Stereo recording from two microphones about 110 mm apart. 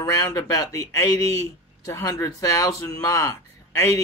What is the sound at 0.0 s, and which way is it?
Speech, 30° left (ahead or behind).